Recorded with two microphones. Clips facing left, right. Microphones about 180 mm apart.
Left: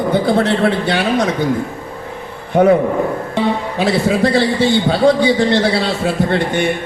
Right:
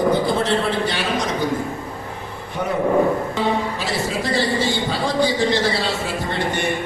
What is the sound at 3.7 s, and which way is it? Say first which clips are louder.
A man's voice: left 9 dB; 60° left (ahead or behind).